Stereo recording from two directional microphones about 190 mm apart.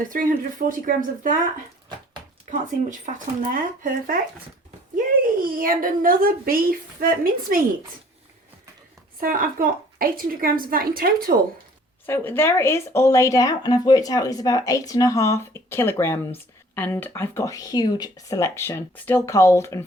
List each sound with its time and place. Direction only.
0.0 s a woman's voice: 45° right (ahead or behind)
2.5 s a woman's voice: 40° right (ahead or behind)
9.2 s a woman's voice: 45° right (ahead or behind)
12.0 s speech: 10° left (ahead or behind)